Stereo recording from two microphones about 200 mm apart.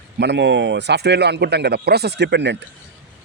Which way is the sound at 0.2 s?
60° right (ahead or behind).